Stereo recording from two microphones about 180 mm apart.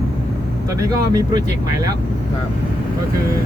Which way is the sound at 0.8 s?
20° right (ahead or behind).